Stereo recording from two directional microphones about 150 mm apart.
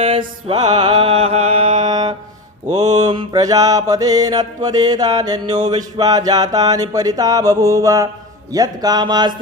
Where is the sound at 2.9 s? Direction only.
30° right (ahead or behind).